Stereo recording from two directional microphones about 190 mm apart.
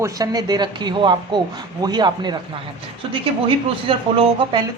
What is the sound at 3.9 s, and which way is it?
Speech, 25° right (ahead or behind).